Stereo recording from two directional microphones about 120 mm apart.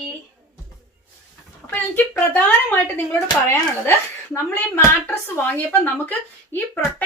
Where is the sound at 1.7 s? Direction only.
15° left (ahead or behind).